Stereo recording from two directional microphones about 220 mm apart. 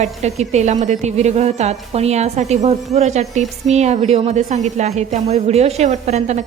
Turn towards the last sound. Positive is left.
turn(degrees=-30)  # may be behind; listen again after turning